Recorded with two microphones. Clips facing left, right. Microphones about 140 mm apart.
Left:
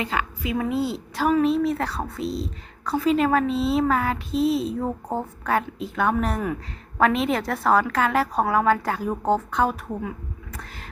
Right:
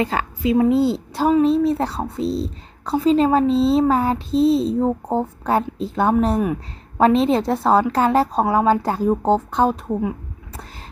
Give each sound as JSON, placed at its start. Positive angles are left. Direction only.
{"t": 0.0, "sound": "a woman's voice", "side_deg": -35}